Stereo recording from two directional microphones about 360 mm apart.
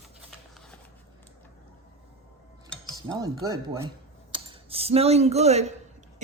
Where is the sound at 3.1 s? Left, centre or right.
Centre.